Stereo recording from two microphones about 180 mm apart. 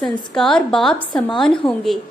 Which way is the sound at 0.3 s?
5° left (ahead or behind).